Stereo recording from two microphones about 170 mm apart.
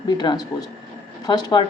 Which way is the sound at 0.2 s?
25° left (ahead or behind).